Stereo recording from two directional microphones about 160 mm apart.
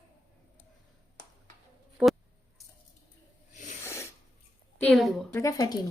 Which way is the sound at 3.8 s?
15° left (ahead or behind).